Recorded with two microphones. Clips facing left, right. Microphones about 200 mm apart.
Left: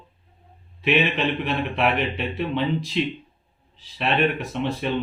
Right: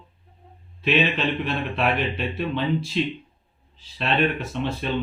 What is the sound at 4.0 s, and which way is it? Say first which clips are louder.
Speech: left 1 dB; 15° left (ahead or behind).